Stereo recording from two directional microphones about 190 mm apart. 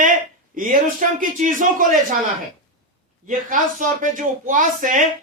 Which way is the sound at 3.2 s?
45° right (ahead or behind).